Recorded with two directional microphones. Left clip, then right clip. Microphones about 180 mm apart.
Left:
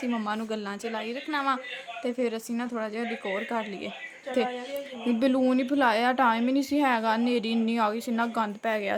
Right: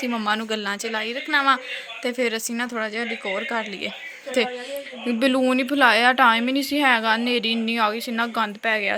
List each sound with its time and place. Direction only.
0.2 s a woman's voice: 5° right (ahead or behind)
4.4 s a woman's voice: centre (ahead or behind)